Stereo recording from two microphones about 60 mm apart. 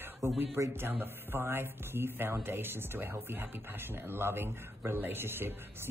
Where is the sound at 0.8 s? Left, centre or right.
Right.